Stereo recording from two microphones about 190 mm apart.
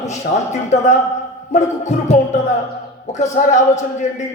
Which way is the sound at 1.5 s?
40° left (ahead or behind).